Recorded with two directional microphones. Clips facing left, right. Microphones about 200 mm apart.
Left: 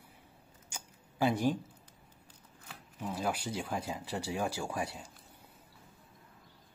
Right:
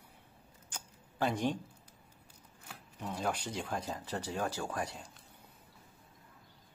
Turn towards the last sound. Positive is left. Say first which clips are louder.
# left 1 dB
turn(degrees=10)  # may be behind; listen again after turning